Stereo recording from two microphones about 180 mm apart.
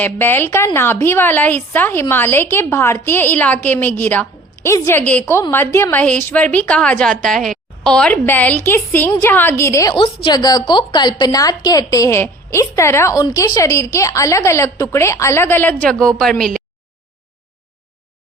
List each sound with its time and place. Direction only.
0.0 s a woman's voice: 10° left (ahead or behind)